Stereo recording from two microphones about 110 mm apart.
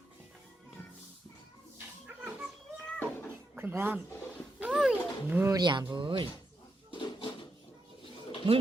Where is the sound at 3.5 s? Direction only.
20° right (ahead or behind).